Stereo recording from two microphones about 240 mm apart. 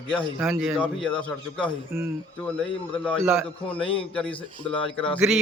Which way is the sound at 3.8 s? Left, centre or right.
Left.